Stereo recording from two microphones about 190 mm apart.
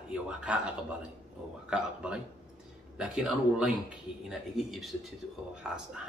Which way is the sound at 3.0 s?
5° right (ahead or behind).